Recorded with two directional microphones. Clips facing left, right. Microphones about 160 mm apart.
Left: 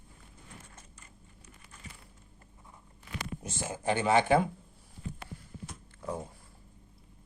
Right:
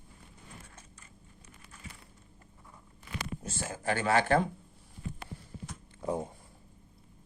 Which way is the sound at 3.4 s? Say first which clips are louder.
Left 1 dB; 15° left (ahead or behind).